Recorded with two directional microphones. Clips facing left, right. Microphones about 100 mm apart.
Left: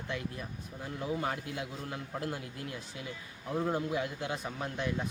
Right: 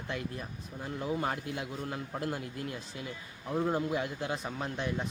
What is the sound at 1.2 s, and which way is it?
Speech, 40° right (ahead or behind).